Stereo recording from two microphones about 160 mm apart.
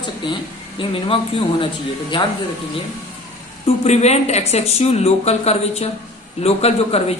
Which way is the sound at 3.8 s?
45° left (ahead or behind).